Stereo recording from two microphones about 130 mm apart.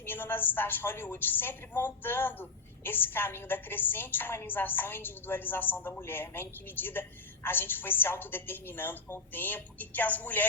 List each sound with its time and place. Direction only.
0.0 s a woman's voice: 15° left (ahead or behind)